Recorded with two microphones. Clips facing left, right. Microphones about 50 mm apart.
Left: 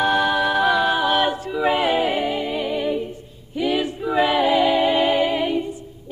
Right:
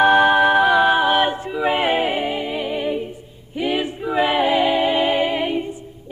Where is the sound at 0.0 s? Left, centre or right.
Right.